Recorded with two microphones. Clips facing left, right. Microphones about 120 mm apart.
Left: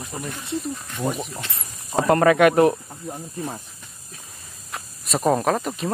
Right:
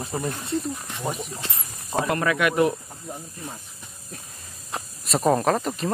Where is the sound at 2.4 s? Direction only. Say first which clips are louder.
Left 6 dB; 40° left (ahead or behind).